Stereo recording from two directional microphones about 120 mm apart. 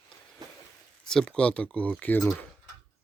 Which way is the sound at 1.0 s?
5° left (ahead or behind).